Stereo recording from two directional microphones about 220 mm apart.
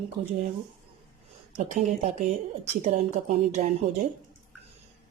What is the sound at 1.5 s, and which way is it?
A woman's voice, 35° right (ahead or behind).